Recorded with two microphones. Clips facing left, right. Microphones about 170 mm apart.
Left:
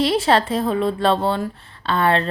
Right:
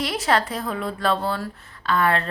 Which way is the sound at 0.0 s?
25° left (ahead or behind).